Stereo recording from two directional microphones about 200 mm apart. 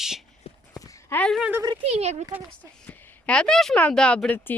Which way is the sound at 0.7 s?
15° left (ahead or behind).